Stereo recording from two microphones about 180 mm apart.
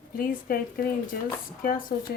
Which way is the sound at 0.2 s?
55° left (ahead or behind).